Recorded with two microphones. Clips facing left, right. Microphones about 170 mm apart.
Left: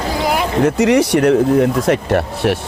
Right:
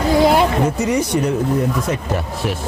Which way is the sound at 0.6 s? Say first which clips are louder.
Left 5 dB; 80° left.